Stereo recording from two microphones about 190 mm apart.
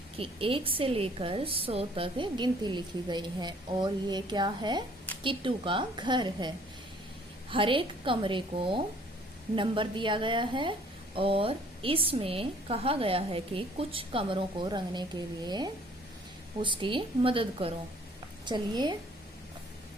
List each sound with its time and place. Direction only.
0.2 s a woman's voice: 30° right (ahead or behind)
7.5 s a woman's voice: 25° right (ahead or behind)